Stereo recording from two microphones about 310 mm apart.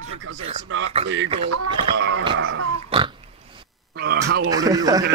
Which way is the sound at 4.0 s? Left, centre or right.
Right.